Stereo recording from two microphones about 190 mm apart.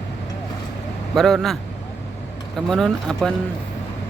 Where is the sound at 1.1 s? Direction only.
Centre (ahead or behind).